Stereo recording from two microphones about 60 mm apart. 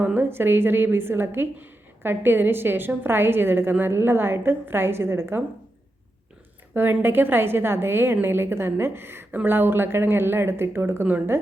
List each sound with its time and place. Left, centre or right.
0.0 s a sound: right
0.3 s a woman's voice: right
7.0 s a woman's voice: right
11.0 s a woman's voice: right